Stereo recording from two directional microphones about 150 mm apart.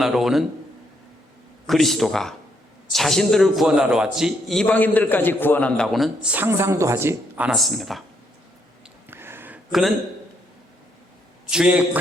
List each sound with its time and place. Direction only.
0.0 s a man's voice: centre (ahead or behind)
1.6 s a man's voice: centre (ahead or behind)
6.3 s a woman's voice: 15° right (ahead or behind); by 8.0 s centre (ahead or behind)
9.0 s a sound: 15° right (ahead or behind)
11.5 s a woman's voice: 5° right (ahead or behind)